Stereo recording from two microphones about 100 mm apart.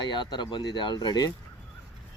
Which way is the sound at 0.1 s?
50° left (ahead or behind).